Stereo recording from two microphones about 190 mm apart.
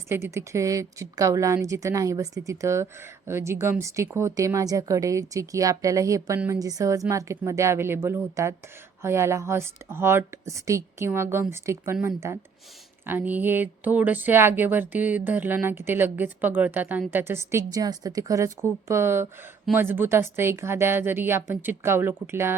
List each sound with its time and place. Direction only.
0.1 s a woman's voice: 15° right (ahead or behind)